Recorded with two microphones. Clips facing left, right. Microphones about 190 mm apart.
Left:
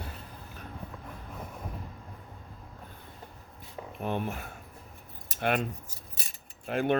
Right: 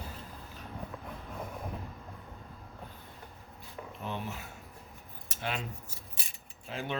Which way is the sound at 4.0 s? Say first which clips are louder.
Left 7 dB; 55° left (ahead or behind).